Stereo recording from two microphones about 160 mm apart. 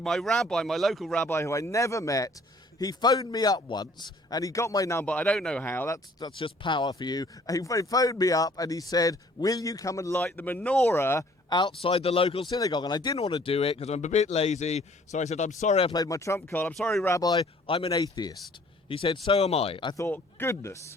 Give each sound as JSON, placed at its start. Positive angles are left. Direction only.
{"t": 0.0, "sound": "speech", "side_deg": 5}
{"t": 6.1, "sound": "speech", "side_deg": 30}
{"t": 11.4, "sound": "speech", "side_deg": 30}
{"t": 15.9, "sound": "speech", "side_deg": 20}
{"t": 17.1, "sound": "speech", "side_deg": 25}
{"t": 17.4, "sound": "speech", "side_deg": 35}
{"t": 18.0, "sound": "speech", "side_deg": 25}
{"t": 18.9, "sound": "speech", "side_deg": 35}
{"t": 20.0, "sound": "speech", "side_deg": 15}